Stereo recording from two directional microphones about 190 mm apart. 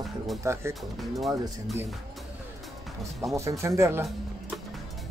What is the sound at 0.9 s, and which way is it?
Speech, centre (ahead or behind).